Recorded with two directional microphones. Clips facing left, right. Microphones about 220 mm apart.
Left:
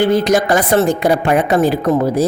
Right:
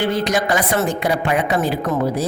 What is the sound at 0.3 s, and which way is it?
A woman's voice, 45° left (ahead or behind).